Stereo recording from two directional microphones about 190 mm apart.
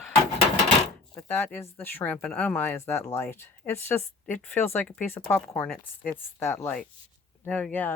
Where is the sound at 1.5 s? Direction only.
10° left (ahead or behind).